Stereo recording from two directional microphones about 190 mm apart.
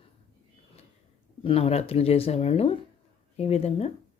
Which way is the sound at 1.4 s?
30° left (ahead or behind).